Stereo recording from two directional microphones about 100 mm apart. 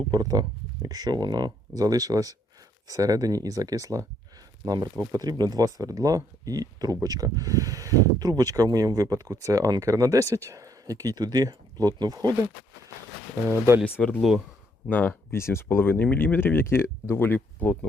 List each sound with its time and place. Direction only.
0.1 s speech: 40° right (ahead or behind)
13.5 s speech: 25° right (ahead or behind)
13.8 s speech: 15° left (ahead or behind)
14.2 s speech: 5° right (ahead or behind)
14.8 s speech: 20° left (ahead or behind)